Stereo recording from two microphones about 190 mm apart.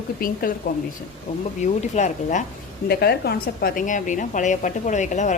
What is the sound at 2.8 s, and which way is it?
A woman's voice, 55° left (ahead or behind).